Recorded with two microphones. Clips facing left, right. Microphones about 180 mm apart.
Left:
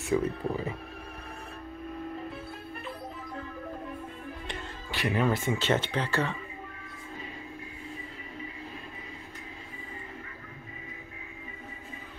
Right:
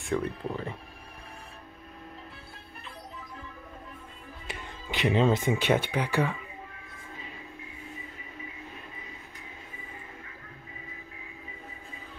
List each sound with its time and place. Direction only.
0.0 s speech: 5° left (ahead or behind)
4.8 s speech: 20° right (ahead or behind)